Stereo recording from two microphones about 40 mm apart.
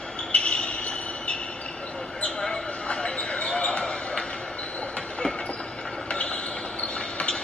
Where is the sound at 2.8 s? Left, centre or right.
Left.